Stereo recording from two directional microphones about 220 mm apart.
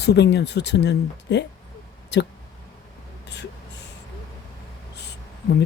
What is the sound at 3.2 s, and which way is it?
Speech, 50° left (ahead or behind).